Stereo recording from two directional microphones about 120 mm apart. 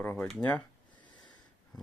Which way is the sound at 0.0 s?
20° left (ahead or behind).